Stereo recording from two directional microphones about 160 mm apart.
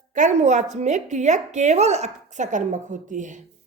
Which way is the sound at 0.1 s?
50° right (ahead or behind).